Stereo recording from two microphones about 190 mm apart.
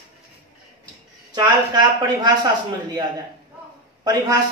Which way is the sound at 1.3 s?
20° right (ahead or behind).